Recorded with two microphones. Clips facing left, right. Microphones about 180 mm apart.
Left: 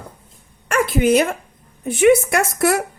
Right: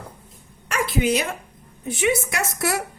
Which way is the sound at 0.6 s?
50° left (ahead or behind).